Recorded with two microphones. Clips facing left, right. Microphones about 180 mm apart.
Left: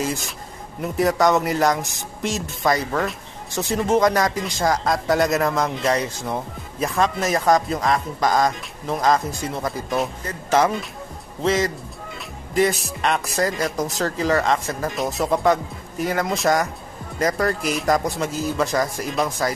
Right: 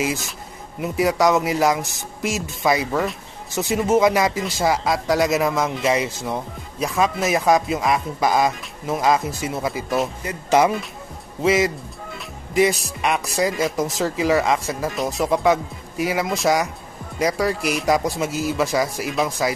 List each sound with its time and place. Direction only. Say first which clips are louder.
0.7 s speech: even; centre (ahead or behind)